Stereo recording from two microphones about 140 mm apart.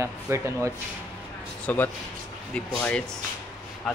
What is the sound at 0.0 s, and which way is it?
Speech, 20° right (ahead or behind).